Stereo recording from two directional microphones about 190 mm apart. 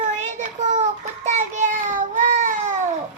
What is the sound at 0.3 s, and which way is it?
Child singing, 40° right (ahead or behind).